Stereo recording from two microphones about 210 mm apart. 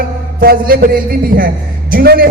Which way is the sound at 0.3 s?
45° right (ahead or behind).